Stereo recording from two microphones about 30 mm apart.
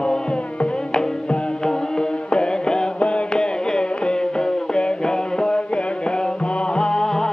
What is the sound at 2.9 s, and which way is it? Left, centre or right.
Music, left.